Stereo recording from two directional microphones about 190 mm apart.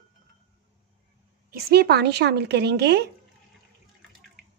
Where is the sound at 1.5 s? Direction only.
55° right (ahead or behind).